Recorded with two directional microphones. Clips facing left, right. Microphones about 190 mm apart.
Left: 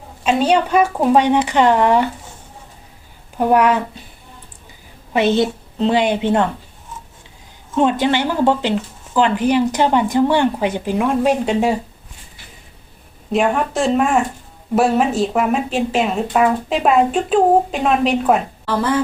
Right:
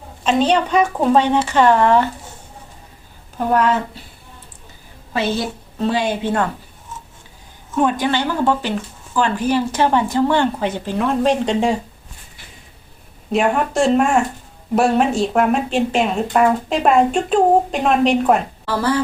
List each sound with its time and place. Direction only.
0.3 s speech: 10° left (ahead or behind)
3.3 s speech: 15° left (ahead or behind)
5.1 s a woman's voice: 20° left (ahead or behind)
7.8 s speech: 20° left (ahead or behind); by 11.8 s 5° left (ahead or behind)
13.3 s speech: centre (ahead or behind)
18.8 s a woman's voice: 20° left (ahead or behind)